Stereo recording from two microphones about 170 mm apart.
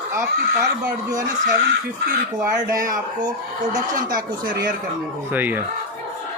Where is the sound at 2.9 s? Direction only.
25° right (ahead or behind).